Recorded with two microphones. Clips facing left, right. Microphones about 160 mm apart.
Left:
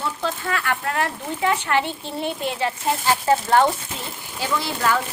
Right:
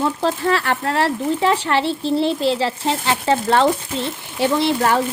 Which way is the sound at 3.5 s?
75° right (ahead or behind).